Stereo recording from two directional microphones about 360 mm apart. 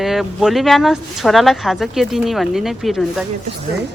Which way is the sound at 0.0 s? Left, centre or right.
Centre.